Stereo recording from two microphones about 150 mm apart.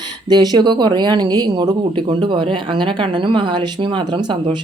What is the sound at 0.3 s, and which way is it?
Speech, 25° right (ahead or behind).